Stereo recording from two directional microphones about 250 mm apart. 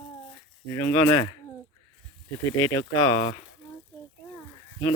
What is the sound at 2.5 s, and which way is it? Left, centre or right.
Speech, centre.